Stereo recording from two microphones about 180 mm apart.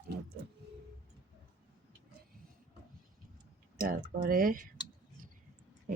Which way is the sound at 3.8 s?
55° right (ahead or behind).